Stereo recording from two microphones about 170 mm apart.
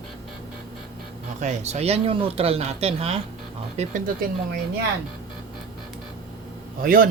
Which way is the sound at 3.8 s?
55° right (ahead or behind).